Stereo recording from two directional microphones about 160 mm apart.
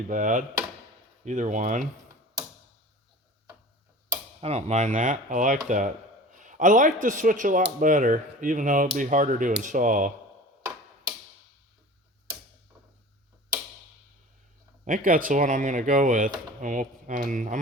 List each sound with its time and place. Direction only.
0.1 s speech: 55° right (ahead or behind)
4.4 s speech: 40° right (ahead or behind)
14.8 s speech: 60° right (ahead or behind)